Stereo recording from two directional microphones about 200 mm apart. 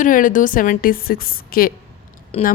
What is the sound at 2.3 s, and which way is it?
Speech, 30° left (ahead or behind).